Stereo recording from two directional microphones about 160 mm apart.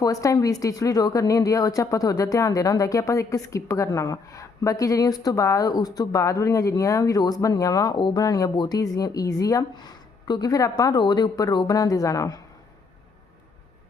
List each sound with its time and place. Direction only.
0.0 s speech: 20° left (ahead or behind)